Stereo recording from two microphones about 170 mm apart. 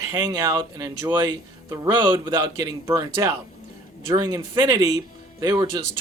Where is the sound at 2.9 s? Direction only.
15° right (ahead or behind).